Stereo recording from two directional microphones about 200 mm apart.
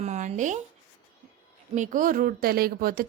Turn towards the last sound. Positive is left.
turn(degrees=-45)  # may be behind; listen again after turning